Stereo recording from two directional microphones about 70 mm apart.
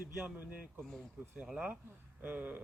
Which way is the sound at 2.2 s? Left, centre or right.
Right.